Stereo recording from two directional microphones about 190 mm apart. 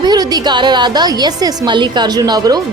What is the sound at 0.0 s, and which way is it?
A woman's voice, 20° right (ahead or behind).